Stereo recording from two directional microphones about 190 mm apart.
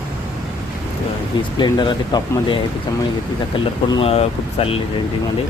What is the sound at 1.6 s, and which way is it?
Speech, 25° left (ahead or behind).